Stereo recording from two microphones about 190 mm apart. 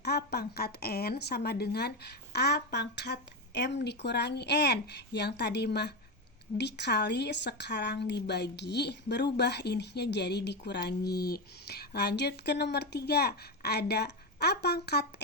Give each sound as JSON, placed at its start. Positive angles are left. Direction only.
{"t": 0.0, "sound": "a woman's voice", "side_deg": 60}